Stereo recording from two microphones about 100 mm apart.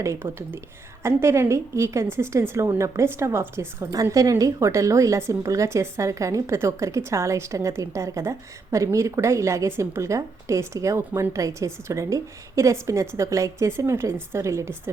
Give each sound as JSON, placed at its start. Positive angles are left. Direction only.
{"t": 0.0, "sound": "a woman's voice", "side_deg": -25}